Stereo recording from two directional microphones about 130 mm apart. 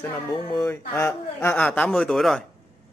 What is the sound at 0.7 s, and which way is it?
Speech, 20° left (ahead or behind).